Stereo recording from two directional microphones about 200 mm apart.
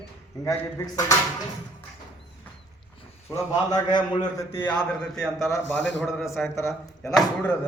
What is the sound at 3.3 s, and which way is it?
A man's voice, 20° left (ahead or behind).